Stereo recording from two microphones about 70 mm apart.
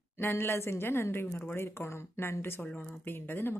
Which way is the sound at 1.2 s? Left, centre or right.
Left.